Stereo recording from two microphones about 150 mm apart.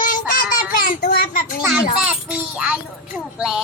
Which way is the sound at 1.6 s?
5° right (ahead or behind).